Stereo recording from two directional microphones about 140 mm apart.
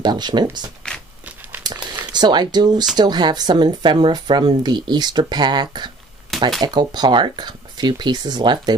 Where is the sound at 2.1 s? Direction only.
30° right (ahead or behind).